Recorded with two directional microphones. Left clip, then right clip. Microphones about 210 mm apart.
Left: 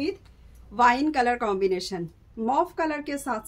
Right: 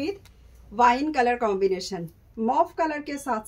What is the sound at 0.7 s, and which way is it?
A woman's voice, 20° left (ahead or behind).